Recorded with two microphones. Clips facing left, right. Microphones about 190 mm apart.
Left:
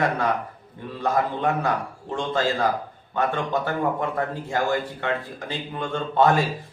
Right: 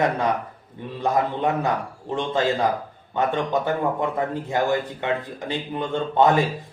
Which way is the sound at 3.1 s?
20° right (ahead or behind).